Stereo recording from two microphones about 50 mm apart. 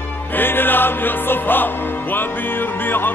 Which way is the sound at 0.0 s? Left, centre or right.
Left.